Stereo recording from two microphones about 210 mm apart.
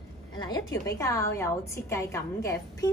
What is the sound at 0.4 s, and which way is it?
A woman's voice, 20° left (ahead or behind).